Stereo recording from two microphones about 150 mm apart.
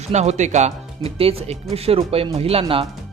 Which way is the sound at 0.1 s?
50° right (ahead or behind).